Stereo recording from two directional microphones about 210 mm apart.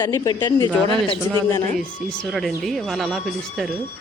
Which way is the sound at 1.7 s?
Centre (ahead or behind).